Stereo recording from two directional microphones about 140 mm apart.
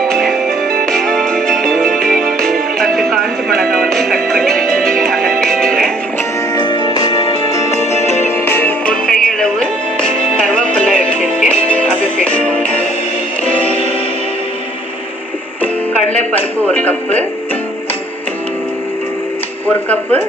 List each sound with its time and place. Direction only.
0.1 s music: centre (ahead or behind)
6.5 s music: 35° left (ahead or behind)
7.8 s music: 55° left (ahead or behind)
8.5 s music: 15° left (ahead or behind)
19.7 s a sound: 10° left (ahead or behind)